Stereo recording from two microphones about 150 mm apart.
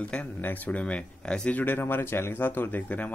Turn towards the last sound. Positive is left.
turn(degrees=10)  # may be behind; listen again after turning